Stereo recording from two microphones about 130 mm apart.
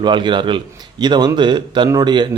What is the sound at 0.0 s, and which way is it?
A man's voice, 35° right (ahead or behind).